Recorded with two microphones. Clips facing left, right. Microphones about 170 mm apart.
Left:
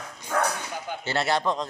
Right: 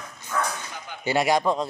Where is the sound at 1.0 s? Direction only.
15° right (ahead or behind).